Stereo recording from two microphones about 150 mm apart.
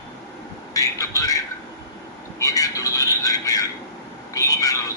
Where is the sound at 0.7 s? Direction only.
20° left (ahead or behind).